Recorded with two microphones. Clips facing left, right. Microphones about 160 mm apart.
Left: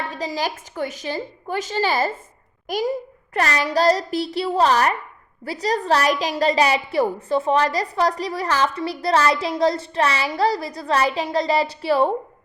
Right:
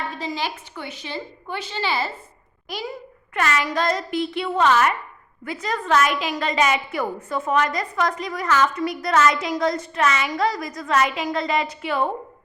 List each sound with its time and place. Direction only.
0.1 s a woman's voice: 35° left (ahead or behind)